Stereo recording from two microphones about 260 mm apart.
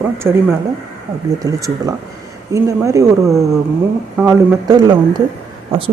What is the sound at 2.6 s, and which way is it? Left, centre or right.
Speech, centre.